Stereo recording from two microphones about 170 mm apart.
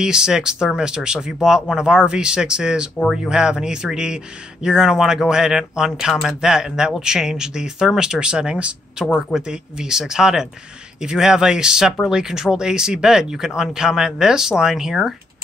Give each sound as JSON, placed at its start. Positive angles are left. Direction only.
{"t": 0.0, "sound": "speech", "side_deg": -5}